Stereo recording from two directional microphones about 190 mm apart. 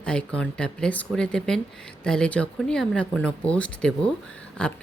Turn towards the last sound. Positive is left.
turn(degrees=5)  # may be behind; listen again after turning